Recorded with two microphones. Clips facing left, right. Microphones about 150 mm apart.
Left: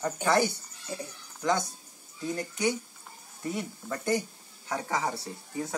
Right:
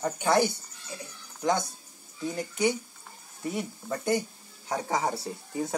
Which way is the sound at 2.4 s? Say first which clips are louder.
Right 3 dB; 10° right (ahead or behind).